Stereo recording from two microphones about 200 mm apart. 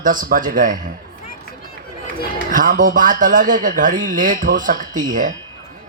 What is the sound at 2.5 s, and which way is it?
A man's voice, 45° right (ahead or behind).